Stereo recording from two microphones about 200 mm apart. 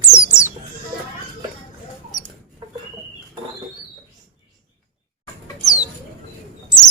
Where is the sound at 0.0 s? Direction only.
15° left (ahead or behind).